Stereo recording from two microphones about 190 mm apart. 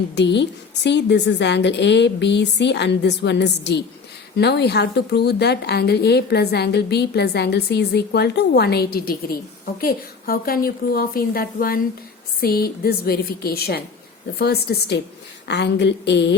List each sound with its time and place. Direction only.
0.2 s a woman's voice: 65° left (ahead or behind)